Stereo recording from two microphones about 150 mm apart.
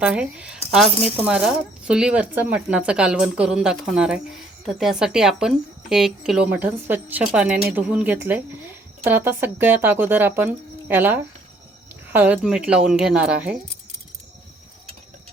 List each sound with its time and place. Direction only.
0.0 s speech: 5° right (ahead or behind)